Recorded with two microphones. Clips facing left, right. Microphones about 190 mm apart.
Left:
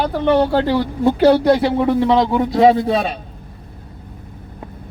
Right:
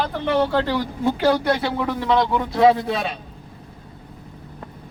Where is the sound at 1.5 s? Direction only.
20° left (ahead or behind).